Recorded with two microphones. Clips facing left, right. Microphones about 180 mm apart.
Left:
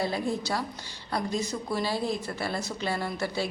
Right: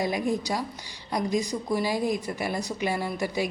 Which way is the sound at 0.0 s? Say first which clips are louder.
Right 2 dB; 15° right (ahead or behind).